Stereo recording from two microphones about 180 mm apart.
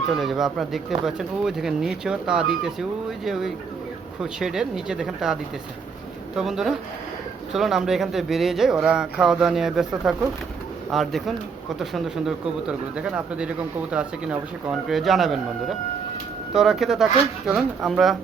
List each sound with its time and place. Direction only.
0.1 s speech: centre (ahead or behind)
16.5 s speech: centre (ahead or behind)